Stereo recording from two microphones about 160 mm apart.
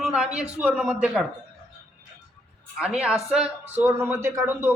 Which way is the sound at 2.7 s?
5° right (ahead or behind).